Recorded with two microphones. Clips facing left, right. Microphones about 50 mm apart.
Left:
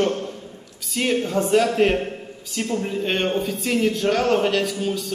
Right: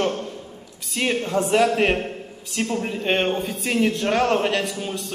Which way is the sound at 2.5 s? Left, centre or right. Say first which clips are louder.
Even; centre.